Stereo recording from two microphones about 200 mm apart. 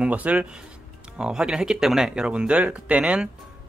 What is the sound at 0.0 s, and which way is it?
Speech, 5° right (ahead or behind).